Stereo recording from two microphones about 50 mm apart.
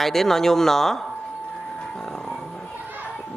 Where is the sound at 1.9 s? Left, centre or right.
Centre.